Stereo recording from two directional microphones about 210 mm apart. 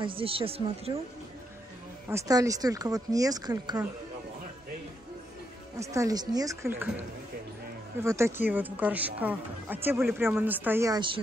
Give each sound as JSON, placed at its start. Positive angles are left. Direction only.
{"t": 0.0, "sound": "speech", "side_deg": -25}
{"t": 2.0, "sound": "speech", "side_deg": -15}
{"t": 5.9, "sound": "speech", "side_deg": -15}
{"t": 8.0, "sound": "speech", "side_deg": -15}